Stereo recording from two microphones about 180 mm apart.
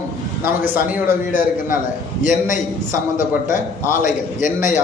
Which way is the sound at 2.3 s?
45° left (ahead or behind).